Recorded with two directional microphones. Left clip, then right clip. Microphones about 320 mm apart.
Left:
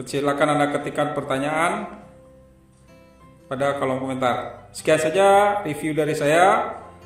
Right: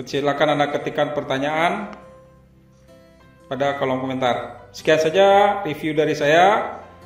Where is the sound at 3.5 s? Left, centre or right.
Centre.